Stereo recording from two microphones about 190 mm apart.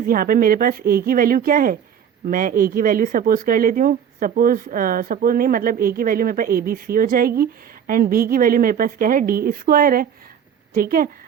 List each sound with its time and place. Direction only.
0.0 s speech: 50° right (ahead or behind)